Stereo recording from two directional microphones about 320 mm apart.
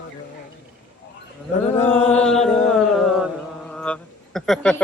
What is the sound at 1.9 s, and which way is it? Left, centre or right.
Speech, centre.